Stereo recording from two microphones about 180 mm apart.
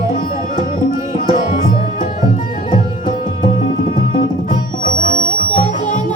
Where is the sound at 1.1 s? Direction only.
45° left (ahead or behind).